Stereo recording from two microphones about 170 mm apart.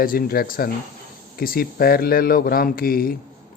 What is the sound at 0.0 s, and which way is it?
Speech, 60° left (ahead or behind).